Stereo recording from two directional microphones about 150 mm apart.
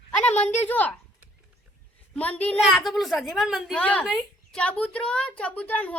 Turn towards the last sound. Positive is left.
turn(degrees=10)  # may be behind; listen again after turning